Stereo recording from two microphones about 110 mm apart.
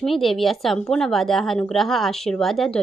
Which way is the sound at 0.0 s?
Centre (ahead or behind).